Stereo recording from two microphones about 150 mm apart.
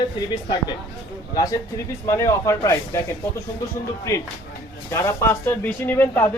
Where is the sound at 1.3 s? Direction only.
25° left (ahead or behind).